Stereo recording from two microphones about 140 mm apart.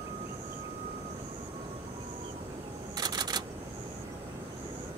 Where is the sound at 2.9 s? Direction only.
30° right (ahead or behind).